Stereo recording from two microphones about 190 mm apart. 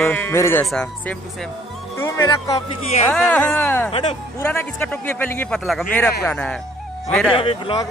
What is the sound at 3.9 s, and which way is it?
Speech, 30° left (ahead or behind).